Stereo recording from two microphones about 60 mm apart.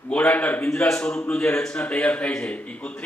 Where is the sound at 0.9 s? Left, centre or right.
Centre.